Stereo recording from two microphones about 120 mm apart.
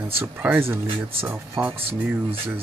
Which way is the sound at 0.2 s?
15° right (ahead or behind).